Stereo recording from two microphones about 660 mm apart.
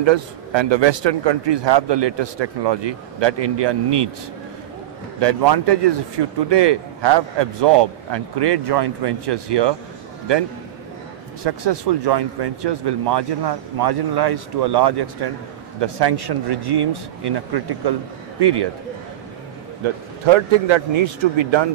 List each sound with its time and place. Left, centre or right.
0.0 s a man's voice: right
5.2 s a man's voice: right
11.4 s a man's voice: right
19.8 s speech: right